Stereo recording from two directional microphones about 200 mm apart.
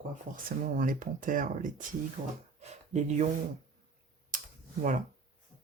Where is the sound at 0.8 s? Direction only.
40° right (ahead or behind).